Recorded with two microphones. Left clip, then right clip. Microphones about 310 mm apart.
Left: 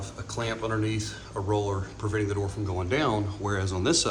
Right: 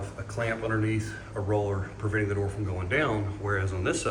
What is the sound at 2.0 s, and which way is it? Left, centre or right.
Speech, centre.